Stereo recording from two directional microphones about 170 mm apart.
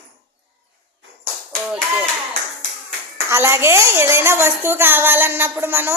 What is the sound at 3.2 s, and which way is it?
A woman's voice, 15° right (ahead or behind).